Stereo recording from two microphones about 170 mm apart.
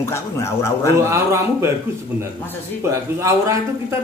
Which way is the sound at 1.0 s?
15° right (ahead or behind).